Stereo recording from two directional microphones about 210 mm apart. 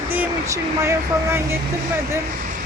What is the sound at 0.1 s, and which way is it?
Speech, 10° right (ahead or behind).